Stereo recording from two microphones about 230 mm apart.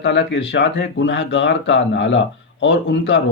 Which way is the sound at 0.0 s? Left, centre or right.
Left.